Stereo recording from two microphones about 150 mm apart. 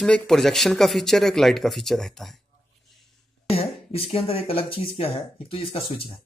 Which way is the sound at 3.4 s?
40° left (ahead or behind).